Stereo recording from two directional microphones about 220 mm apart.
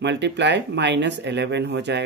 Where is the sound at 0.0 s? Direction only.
50° right (ahead or behind).